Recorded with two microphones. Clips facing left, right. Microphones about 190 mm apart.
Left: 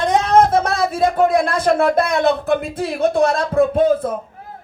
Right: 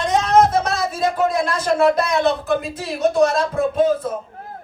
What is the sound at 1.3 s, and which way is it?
Speech, 55° left (ahead or behind).